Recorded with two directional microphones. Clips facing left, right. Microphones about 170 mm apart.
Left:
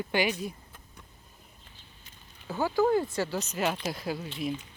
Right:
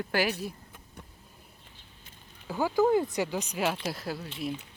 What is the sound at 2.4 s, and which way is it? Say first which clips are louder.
Speech: right 1 dB; 15° right (ahead or behind).